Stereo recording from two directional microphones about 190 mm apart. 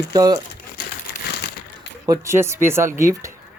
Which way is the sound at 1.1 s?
55° left (ahead or behind).